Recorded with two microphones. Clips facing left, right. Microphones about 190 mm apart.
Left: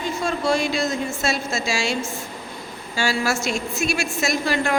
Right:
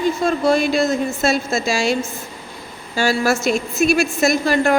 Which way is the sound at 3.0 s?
50° right (ahead or behind).